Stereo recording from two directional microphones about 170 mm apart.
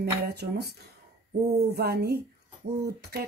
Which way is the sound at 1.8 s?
65° right (ahead or behind).